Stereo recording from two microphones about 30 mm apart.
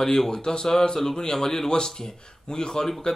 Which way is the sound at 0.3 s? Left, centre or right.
Left.